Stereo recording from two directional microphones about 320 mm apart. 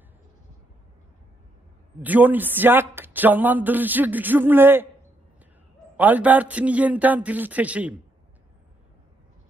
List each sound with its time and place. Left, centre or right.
2.0 s speech: centre
5.9 s speech: centre